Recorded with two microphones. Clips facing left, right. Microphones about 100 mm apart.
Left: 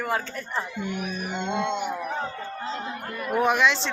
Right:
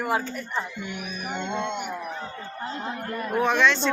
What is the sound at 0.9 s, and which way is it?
Music, 40° left (ahead or behind).